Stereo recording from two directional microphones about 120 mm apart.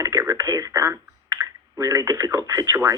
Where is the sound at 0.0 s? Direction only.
25° right (ahead or behind).